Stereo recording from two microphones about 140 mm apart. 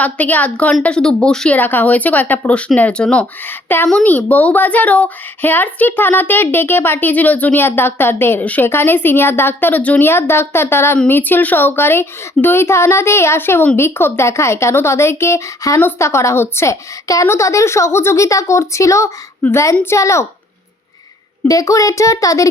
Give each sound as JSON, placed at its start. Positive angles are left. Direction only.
{"t": 0.0, "sound": "speech", "side_deg": 10}
{"t": 21.4, "sound": "speech", "side_deg": 25}